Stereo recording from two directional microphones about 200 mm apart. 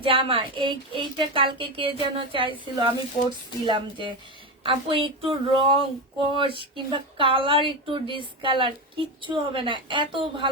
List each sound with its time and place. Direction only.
0.0 s speech: 25° right (ahead or behind)